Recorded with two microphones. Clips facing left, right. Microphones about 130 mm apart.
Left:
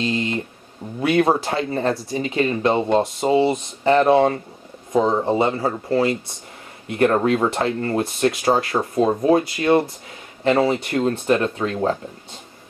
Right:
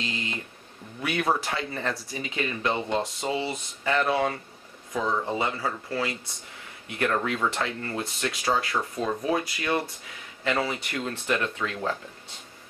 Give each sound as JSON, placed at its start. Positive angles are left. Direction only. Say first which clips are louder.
{"t": 1.0, "sound": "speech", "louder": "left 9 dB", "side_deg": 30}
{"t": 2.7, "sound": "speech", "louder": "left 9 dB", "side_deg": 50}
{"t": 3.8, "sound": "speech", "louder": "left 10 dB", "side_deg": 35}